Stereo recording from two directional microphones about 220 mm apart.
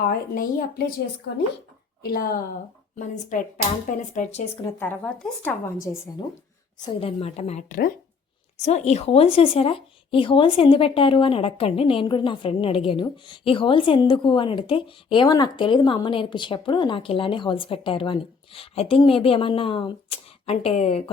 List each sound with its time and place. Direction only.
0.0 s a woman's voice: 40° left (ahead or behind)
2.0 s a woman's voice: 45° left (ahead or behind)
4.8 s speech: 5° left (ahead or behind)
6.7 s a woman's voice: 20° left (ahead or behind)